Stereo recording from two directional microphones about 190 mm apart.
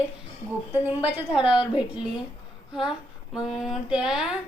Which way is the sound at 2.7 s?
5° right (ahead or behind).